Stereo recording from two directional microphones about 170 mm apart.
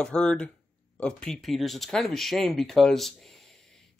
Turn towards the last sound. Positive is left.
turn(degrees=0)  # may be behind; listen again after turning